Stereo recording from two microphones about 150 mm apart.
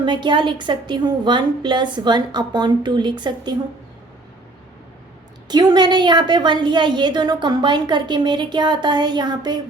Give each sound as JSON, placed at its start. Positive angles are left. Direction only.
{"t": 0.0, "sound": "a woman's voice", "side_deg": -30}
{"t": 5.5, "sound": "a woman's voice", "side_deg": -30}